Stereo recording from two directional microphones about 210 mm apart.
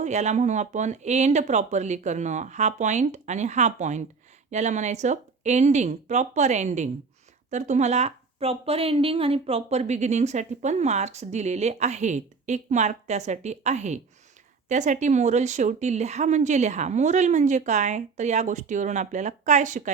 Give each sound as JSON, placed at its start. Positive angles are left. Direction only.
{"t": 0.0, "sound": "a woman's voice", "side_deg": -35}